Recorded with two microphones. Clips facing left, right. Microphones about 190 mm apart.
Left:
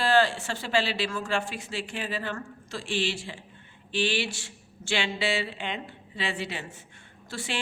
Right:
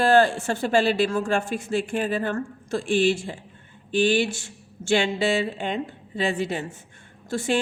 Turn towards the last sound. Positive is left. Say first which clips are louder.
# right 10 dB
turn(degrees=-45)  # may be behind; listen again after turning